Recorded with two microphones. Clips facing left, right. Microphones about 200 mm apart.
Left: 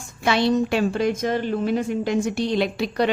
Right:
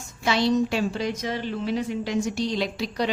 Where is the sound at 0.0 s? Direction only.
60° left (ahead or behind).